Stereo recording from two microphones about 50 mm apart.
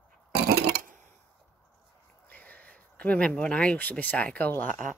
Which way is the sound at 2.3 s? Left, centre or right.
Left.